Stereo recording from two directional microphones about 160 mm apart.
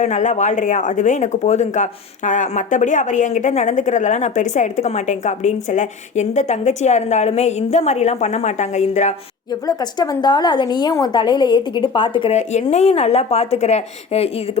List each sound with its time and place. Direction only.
0.0 s speech: 50° left (ahead or behind)
9.5 s a woman's voice: 25° left (ahead or behind)
12.3 s a woman's voice: 45° left (ahead or behind)